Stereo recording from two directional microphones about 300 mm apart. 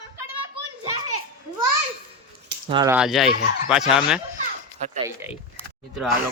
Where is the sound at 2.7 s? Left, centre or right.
Centre.